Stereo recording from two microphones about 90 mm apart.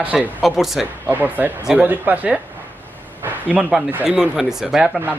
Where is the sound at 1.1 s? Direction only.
20° right (ahead or behind).